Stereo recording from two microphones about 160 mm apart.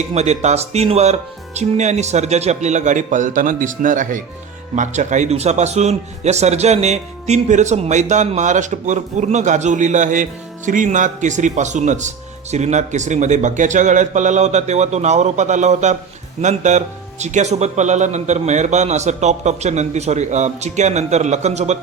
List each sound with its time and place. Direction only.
0.1 s speech: 45° right (ahead or behind)